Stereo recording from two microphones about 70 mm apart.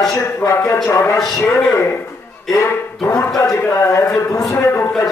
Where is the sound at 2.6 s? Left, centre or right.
Left.